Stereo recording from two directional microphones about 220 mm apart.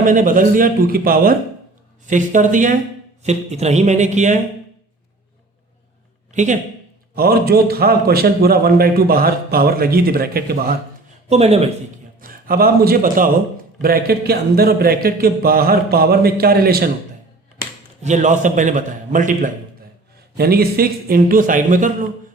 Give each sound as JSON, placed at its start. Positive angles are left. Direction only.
{"t": 0.0, "sound": "a man's voice", "side_deg": -40}
{"t": 6.3, "sound": "a man's voice", "side_deg": -35}
{"t": 7.2, "sound": "a man's voice", "side_deg": -45}
{"t": 11.3, "sound": "speech", "side_deg": -30}
{"t": 12.2, "sound": "a man's voice", "side_deg": -40}
{"t": 18.0, "sound": "a man's voice", "side_deg": -35}